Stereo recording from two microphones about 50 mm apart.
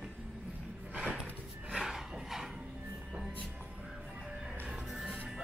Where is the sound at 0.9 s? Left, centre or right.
Right.